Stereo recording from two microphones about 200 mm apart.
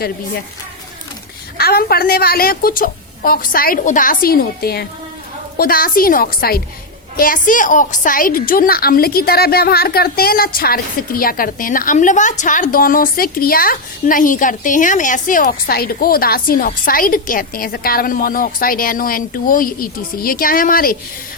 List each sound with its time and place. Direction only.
1.5 s a woman's voice: 50° left (ahead or behind)